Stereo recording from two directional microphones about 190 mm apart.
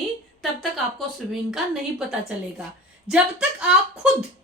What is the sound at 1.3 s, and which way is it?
Speech, centre (ahead or behind).